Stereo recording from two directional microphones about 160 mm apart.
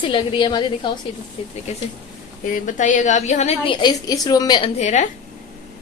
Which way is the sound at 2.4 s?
55° left (ahead or behind).